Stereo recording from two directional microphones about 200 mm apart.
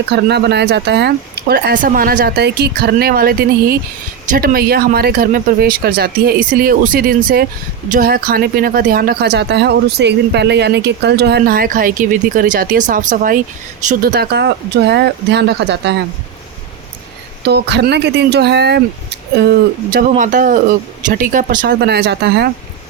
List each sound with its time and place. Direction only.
0.1 s speech: 55° right (ahead or behind)
17.4 s speech: 55° right (ahead or behind)